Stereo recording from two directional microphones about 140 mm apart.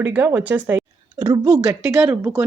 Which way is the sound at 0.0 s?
15° right (ahead or behind).